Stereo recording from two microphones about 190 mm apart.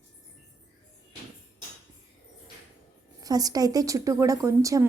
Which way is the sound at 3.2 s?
20° right (ahead or behind).